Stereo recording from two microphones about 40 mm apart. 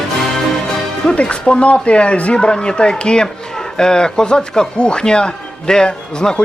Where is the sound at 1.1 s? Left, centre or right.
Left.